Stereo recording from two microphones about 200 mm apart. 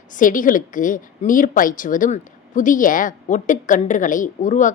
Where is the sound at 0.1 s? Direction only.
40° left (ahead or behind).